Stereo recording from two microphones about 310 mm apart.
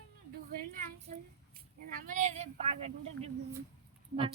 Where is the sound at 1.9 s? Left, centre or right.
Right.